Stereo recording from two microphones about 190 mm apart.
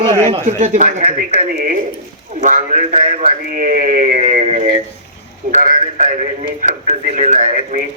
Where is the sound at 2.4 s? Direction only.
40° right (ahead or behind).